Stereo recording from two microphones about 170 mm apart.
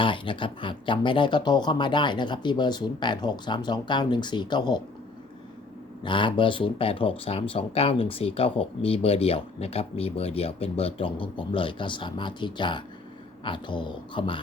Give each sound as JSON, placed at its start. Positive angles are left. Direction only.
{"t": 0.0, "sound": "speech", "side_deg": 30}
{"t": 6.0, "sound": "speech", "side_deg": 30}